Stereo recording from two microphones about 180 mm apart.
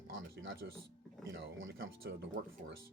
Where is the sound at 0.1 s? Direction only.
90° right; by 2.7 s 70° right (ahead or behind).